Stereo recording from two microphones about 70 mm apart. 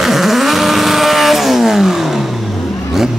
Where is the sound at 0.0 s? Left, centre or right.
Centre.